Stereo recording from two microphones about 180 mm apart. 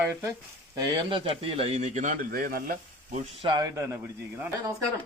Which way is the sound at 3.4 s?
25° right (ahead or behind).